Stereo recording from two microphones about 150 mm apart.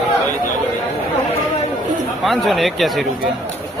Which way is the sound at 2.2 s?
Centre (ahead or behind).